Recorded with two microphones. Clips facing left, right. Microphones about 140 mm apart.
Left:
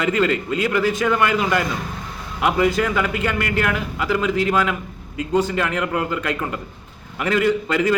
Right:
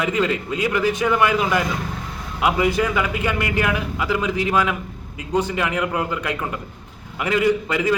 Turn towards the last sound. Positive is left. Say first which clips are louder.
# left 1 dB
turn(degrees=-15)  # may be behind; listen again after turning